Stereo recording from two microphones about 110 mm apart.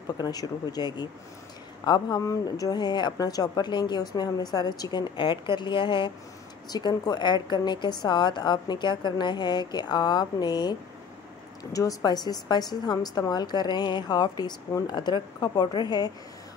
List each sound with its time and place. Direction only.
0.2 s speech: 35° left (ahead or behind)